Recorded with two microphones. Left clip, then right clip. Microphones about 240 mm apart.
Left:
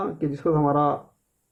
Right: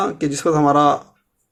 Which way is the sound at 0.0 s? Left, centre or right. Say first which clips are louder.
Right 6 dB; right.